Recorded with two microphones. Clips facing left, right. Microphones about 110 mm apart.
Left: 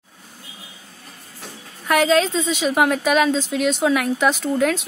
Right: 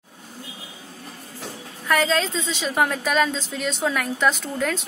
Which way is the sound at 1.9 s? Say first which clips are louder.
Left 4 dB; 10° left (ahead or behind).